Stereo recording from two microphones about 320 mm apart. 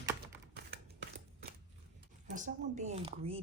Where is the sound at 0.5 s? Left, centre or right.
Right.